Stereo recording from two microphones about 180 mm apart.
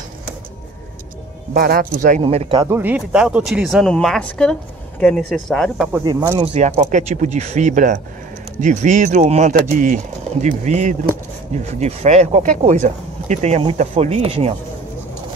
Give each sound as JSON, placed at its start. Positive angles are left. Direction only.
{"t": 1.5, "sound": "speech", "side_deg": -55}
{"t": 2.2, "sound": "speech", "side_deg": -30}
{"t": 2.7, "sound": "speech", "side_deg": -10}
{"t": 6.0, "sound": "speech", "side_deg": -15}
{"t": 6.4, "sound": "speech", "side_deg": -40}